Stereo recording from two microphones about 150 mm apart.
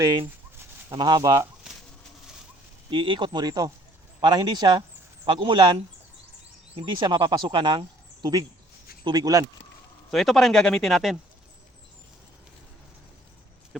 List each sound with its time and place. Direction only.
0.0 s speech: 30° right (ahead or behind)
2.9 s speech: 35° right (ahead or behind)
6.7 s speech: 30° right (ahead or behind)
10.1 s speech: centre (ahead or behind)